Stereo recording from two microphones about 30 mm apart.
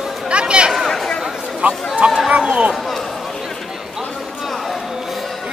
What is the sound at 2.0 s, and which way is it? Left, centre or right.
Run, centre.